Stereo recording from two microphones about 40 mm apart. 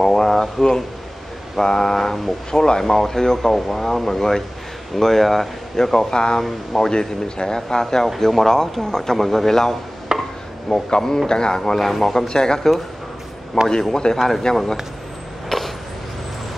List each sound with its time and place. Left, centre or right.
0.0 s speech: centre
6.4 s speech: centre
6.9 s speech: centre
10.1 s chopping: centre
10.7 s speech: centre
11.7 s speech: centre
13.6 s a man's voice: left
15.5 s a sound: centre